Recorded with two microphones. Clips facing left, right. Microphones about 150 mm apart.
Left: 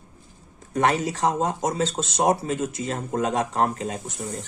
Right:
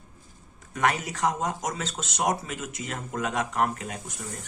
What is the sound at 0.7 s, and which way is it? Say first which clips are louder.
Speech: left 5 dB; 30° left (ahead or behind).